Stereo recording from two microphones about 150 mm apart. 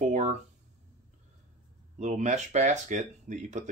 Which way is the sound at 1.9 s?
50° right (ahead or behind).